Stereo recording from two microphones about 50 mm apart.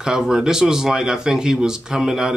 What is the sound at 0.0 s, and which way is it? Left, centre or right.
Speech, centre.